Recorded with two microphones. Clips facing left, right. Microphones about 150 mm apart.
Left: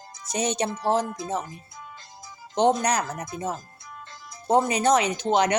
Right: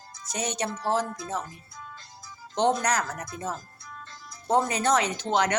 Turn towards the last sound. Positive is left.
turn(degrees=15)  # may be behind; listen again after turning